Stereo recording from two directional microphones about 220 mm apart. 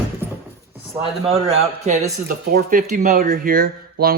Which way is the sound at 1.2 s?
25° right (ahead or behind).